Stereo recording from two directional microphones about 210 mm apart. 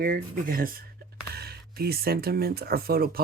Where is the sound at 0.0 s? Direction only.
40° right (ahead or behind).